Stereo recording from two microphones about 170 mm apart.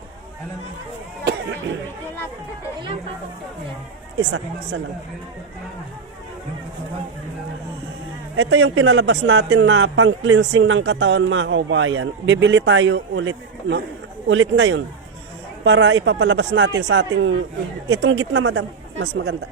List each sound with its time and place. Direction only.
1.2 s speech: 90° right
4.2 s a man's voice: 90° right
8.5 s a man's voice: 90° right
14.3 s a man's voice: 90° right